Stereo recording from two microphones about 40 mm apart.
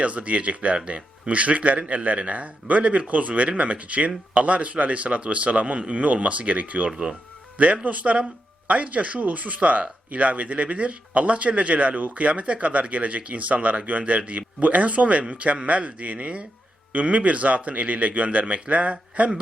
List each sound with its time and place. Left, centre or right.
0.0 s speech: right